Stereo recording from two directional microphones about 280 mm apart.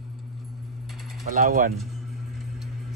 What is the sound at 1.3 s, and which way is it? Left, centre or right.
Speech, right.